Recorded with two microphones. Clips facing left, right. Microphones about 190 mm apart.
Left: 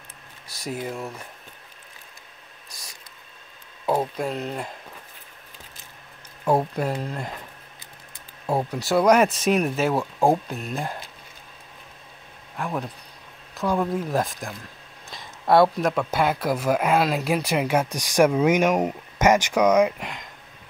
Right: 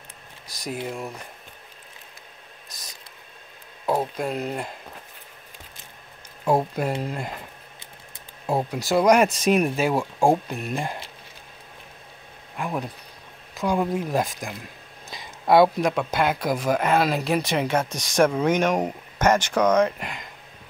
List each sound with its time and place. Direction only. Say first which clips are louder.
0.7 s speech: even; centre (ahead or behind)
3.8 s speech: left 1 dB; 5° left (ahead or behind)
4.2 s speech: right 1 dB; 5° right (ahead or behind)
6.4 s speech: even; 10° right (ahead or behind)
8.5 s speech: even; 5° left (ahead or behind)
12.5 s speech: even; 5° right (ahead or behind)
13.9 s speech: even; centre (ahead or behind)
15.0 s a sound: right 1 dB; centre (ahead or behind)
16.1 s speech: even; 5° left (ahead or behind)
20.0 s speech: even; 5° right (ahead or behind)